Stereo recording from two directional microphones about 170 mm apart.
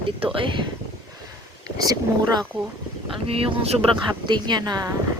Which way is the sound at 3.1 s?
35° right (ahead or behind).